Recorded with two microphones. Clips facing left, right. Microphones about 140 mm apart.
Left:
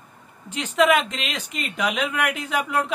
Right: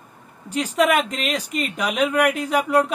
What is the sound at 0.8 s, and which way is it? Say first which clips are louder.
Speech: left 1 dB; 45° right (ahead or behind).